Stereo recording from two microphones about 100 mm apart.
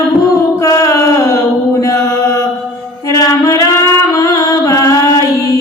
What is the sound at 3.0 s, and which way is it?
Mantra, 35° left (ahead or behind).